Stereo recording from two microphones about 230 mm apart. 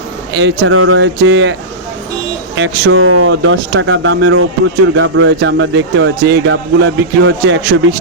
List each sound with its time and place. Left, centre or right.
0.3 s speech: right
2.6 s speech: right